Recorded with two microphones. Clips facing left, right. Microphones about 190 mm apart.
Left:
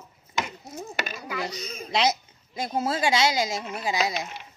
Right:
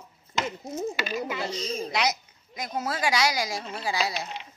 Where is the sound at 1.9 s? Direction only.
25° left (ahead or behind).